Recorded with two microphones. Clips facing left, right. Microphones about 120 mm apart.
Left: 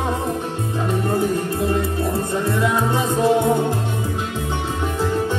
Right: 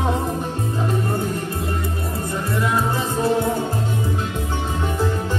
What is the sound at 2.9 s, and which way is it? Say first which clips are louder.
Music: left 3 dB; 25° left (ahead or behind).